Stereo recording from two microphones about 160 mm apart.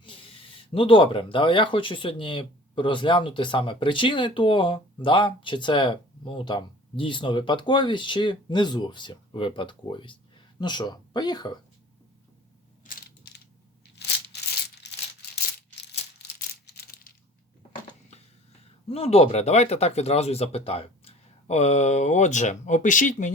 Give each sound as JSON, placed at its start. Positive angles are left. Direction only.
{"t": 0.0, "sound": "speech", "side_deg": 35}
{"t": 12.9, "sound": "mechanisms", "side_deg": 80}
{"t": 18.9, "sound": "speech", "side_deg": 35}